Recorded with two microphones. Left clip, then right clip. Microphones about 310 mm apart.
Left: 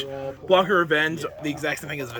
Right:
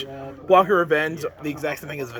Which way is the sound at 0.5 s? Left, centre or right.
Centre.